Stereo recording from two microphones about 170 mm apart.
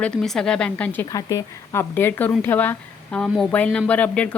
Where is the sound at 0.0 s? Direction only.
5° left (ahead or behind).